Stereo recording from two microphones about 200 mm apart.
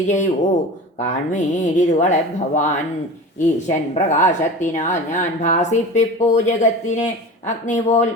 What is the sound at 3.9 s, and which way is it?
A woman's voice, 35° left (ahead or behind).